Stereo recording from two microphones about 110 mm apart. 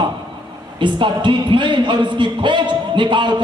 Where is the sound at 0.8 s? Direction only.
45° right (ahead or behind).